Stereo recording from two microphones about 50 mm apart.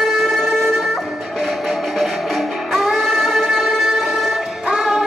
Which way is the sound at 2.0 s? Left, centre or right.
Centre.